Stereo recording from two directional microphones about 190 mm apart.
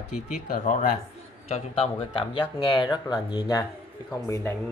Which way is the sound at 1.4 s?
30° left (ahead or behind).